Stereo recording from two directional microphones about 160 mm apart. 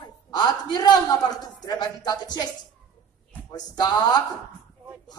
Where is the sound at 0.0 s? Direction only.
25° left (ahead or behind).